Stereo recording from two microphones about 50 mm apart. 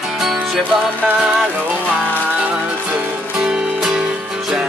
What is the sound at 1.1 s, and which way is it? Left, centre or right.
Music, centre.